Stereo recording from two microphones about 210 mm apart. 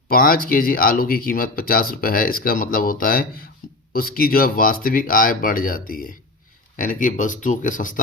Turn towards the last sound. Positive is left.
turn(degrees=40)  # may be behind; listen again after turning